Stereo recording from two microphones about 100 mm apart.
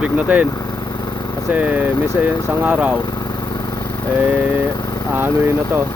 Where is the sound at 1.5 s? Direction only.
15° right (ahead or behind).